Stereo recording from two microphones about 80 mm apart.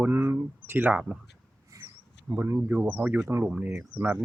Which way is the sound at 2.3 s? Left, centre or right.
Right.